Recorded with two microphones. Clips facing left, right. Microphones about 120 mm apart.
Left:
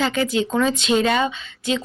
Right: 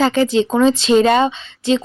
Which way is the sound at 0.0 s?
35° right (ahead or behind).